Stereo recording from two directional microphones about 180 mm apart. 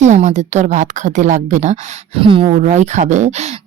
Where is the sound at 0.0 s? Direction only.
40° right (ahead or behind).